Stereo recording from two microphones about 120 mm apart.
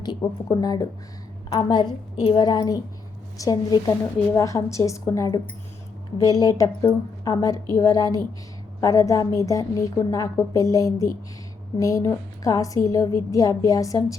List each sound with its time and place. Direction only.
0.0 s a woman's voice: 35° left (ahead or behind)